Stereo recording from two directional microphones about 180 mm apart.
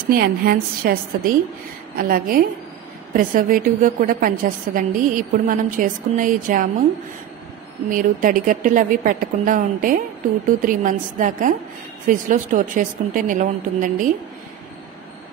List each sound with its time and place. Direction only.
0.1 s a woman's voice: 55° right (ahead or behind)
7.9 s a woman's voice: 50° right (ahead or behind)